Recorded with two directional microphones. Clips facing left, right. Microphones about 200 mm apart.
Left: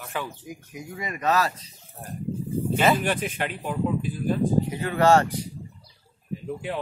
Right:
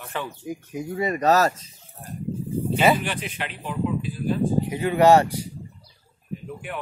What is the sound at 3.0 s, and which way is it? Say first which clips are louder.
Speech: left 4 dB; 45° left (ahead or behind).